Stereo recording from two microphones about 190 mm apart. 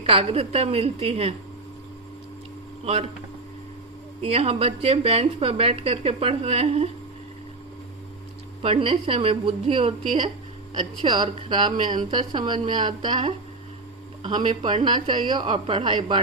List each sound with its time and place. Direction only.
0.0 s speech: 30° right (ahead or behind)
2.8 s speech: 30° right (ahead or behind)
4.2 s speech: 30° right (ahead or behind)
8.6 s speech: 30° right (ahead or behind)